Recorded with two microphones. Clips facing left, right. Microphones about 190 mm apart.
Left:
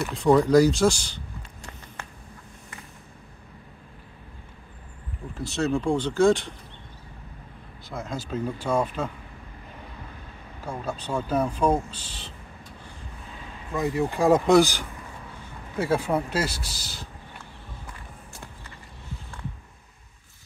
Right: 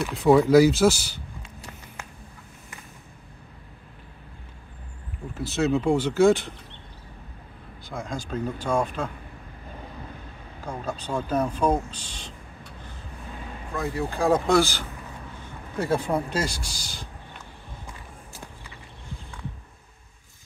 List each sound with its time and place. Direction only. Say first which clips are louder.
0.0 s speech: right 1 dB; centre (ahead or behind)
5.4 s speech: right 2 dB; centre (ahead or behind)
7.9 s speech: even; 5° left (ahead or behind)
10.6 s speech: even; 10° left (ahead or behind)
13.7 s speech: left 3 dB; 20° left (ahead or behind); by 17.0 s 5° left (ahead or behind)